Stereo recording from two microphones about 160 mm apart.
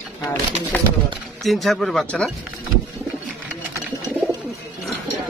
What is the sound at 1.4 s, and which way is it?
Speech, centre (ahead or behind).